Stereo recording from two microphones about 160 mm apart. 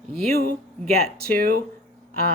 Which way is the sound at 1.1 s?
70° right (ahead or behind).